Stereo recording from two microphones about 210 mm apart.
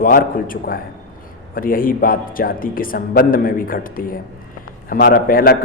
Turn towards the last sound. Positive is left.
turn(degrees=45)  # may be behind; listen again after turning